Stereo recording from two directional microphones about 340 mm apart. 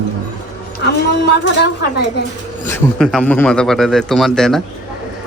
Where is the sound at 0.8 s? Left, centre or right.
Left.